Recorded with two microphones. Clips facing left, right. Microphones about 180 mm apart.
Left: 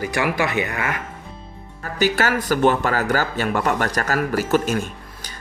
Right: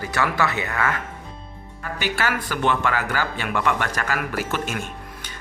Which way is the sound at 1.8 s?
40° left (ahead or behind).